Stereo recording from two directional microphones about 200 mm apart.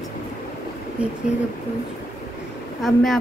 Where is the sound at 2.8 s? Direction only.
Centre (ahead or behind).